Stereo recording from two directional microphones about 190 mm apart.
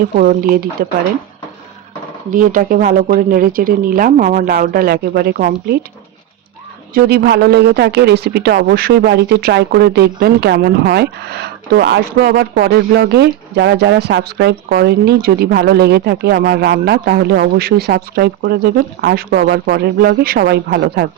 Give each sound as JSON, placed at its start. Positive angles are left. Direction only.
{"t": 0.2, "sound": "speech", "side_deg": -50}
{"t": 2.3, "sound": "speech", "side_deg": -45}
{"t": 6.9, "sound": "a woman's voice", "side_deg": -55}